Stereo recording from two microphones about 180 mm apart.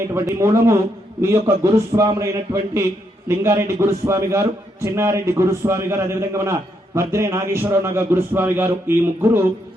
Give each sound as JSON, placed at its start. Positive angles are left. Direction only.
{"t": 0.1, "sound": "a man's voice", "side_deg": -15}